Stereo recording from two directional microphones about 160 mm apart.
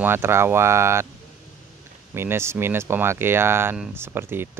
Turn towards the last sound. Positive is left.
turn(degrees=-15)  # may be behind; listen again after turning